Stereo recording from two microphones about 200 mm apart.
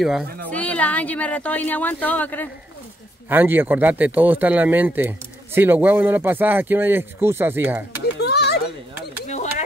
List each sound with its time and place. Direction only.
0.0 s a woman's voice: centre (ahead or behind)
3.3 s speech: 10° right (ahead or behind)
8.0 s a sound: 55° left (ahead or behind)